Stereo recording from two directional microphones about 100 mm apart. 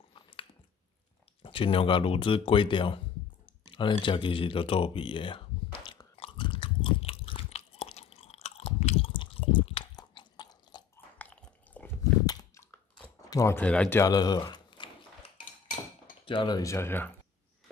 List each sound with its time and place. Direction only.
1.4 s speech: 60° left (ahead or behind)
6.1 s biting: 65° left (ahead or behind)
9.9 s chewing: 45° left (ahead or behind)
11.1 s a sound: 15° left (ahead or behind)
12.0 s a sound: 35° left (ahead or behind)
13.3 s speech: 30° left (ahead or behind)
13.6 s speech: 10° left (ahead or behind)
14.0 s speech: 40° left (ahead or behind)
16.3 s speech: 50° left (ahead or behind)
16.6 s speech: 25° left (ahead or behind)